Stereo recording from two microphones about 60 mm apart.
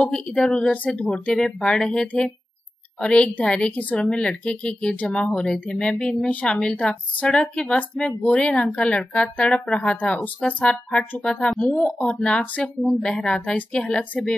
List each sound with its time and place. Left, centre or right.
0.0 s a woman's voice: centre